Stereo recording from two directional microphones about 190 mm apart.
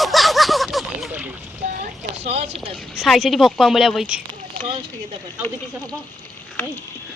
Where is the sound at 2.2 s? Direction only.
35° right (ahead or behind).